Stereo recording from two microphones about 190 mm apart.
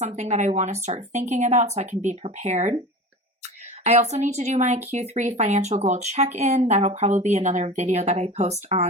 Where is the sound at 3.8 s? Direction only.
35° right (ahead or behind).